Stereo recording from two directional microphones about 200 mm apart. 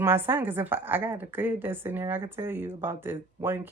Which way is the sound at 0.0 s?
10° right (ahead or behind).